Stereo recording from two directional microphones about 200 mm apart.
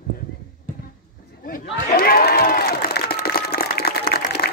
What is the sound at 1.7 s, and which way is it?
Crowd, 50° left (ahead or behind).